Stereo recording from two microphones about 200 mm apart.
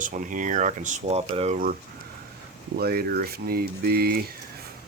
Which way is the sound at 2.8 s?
50° right (ahead or behind).